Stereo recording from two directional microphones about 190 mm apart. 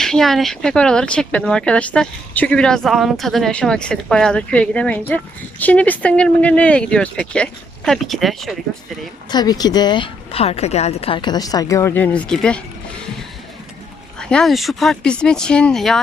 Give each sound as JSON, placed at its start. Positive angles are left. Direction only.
{"t": 0.0, "sound": "speech", "side_deg": 0}
{"t": 9.3, "sound": "speech", "side_deg": 20}
{"t": 14.2, "sound": "speech", "side_deg": 5}